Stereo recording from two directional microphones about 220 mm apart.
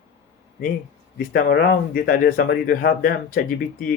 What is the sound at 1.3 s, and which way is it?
Speech, 40° left (ahead or behind).